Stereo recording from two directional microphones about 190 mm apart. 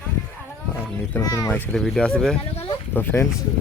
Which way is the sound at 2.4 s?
30° left (ahead or behind).